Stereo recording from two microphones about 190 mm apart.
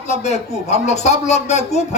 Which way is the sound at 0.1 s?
35° left (ahead or behind).